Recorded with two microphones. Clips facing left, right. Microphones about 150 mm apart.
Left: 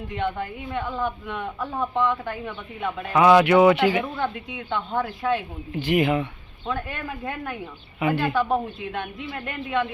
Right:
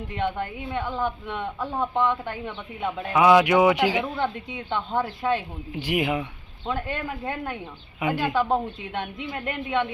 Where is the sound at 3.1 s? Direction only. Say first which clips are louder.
Left 2 dB; 10° right (ahead or behind).